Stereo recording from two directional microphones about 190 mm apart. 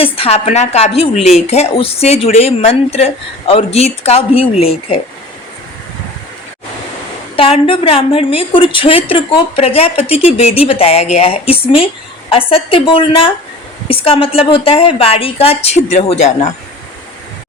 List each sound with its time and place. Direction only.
0.0 s a woman's voice: 30° left (ahead or behind)
7.3 s a woman's voice: 30° left (ahead or behind)